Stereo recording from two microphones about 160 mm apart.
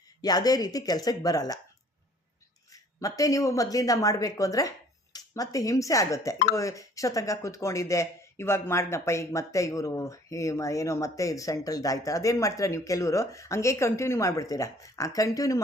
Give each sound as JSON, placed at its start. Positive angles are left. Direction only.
{"t": 0.2, "sound": "speech", "side_deg": 25}
{"t": 2.7, "sound": "speech", "side_deg": 20}